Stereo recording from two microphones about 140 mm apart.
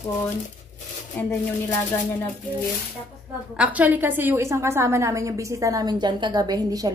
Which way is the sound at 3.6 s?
10° right (ahead or behind).